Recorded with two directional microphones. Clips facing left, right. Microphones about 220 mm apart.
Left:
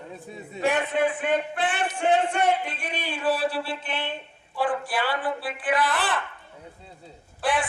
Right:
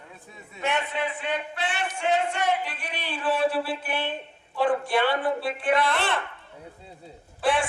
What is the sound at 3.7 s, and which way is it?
A man's voice, 5° right (ahead or behind).